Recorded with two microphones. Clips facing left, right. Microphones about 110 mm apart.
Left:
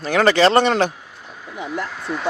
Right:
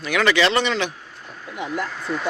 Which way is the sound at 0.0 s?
40° left (ahead or behind).